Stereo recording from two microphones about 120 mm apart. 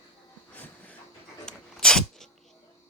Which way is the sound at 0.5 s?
15° left (ahead or behind).